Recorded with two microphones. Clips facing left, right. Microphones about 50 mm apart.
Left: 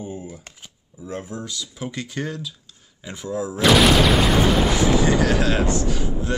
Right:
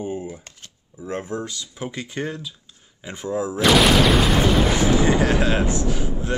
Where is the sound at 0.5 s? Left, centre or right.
Centre.